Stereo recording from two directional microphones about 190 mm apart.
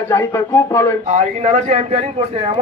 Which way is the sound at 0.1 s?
10° left (ahead or behind).